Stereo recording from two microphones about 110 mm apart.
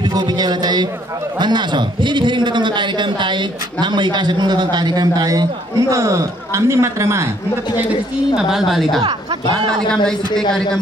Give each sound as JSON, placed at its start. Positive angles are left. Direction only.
{"t": 0.0, "sound": "a man's voice", "side_deg": -40}
{"t": 8.4, "sound": "a woman's voice", "side_deg": -5}